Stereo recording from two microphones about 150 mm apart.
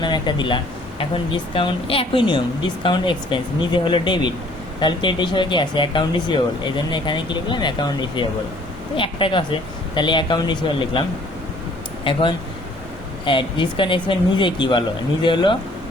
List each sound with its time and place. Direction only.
0.0 s speech: 30° left (ahead or behind)
12.1 s speech: 35° left (ahead or behind)
13.2 s speech: 35° left (ahead or behind)